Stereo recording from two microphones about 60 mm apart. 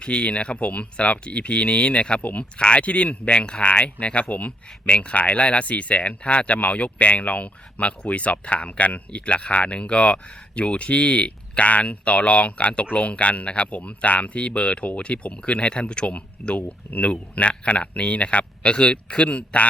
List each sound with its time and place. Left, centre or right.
0.0 s speech: centre